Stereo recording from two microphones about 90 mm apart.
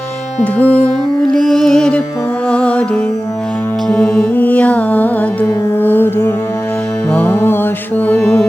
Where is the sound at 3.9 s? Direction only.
10° left (ahead or behind).